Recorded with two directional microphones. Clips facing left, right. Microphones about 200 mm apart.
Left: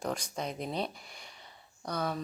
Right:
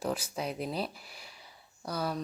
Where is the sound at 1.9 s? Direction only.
5° right (ahead or behind).